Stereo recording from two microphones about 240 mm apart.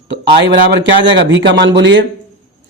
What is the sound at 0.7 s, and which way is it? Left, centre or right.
Speech, right.